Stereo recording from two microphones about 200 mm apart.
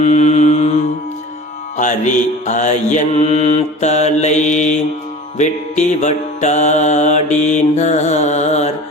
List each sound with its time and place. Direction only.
0.0 s mantra: 35° left (ahead or behind)
1.7 s music: 40° left (ahead or behind)